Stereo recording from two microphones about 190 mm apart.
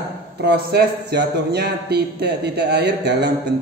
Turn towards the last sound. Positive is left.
turn(degrees=-60)  # may be behind; listen again after turning